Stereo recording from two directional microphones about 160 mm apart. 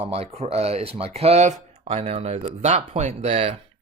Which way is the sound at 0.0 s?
40° right (ahead or behind).